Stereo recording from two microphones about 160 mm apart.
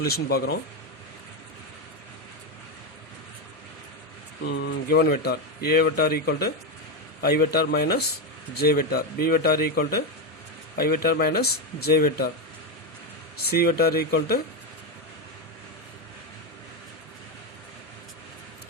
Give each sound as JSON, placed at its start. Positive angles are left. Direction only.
{"t": 0.1, "sound": "speech", "side_deg": 75}
{"t": 4.4, "sound": "speech", "side_deg": 90}
{"t": 13.3, "sound": "speech", "side_deg": 75}